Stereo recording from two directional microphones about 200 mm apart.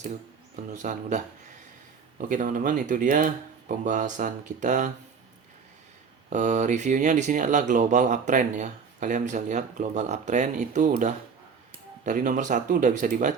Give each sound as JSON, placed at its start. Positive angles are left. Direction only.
{"t": 0.5, "sound": "speech", "side_deg": -40}
{"t": 6.3, "sound": "speech", "side_deg": -35}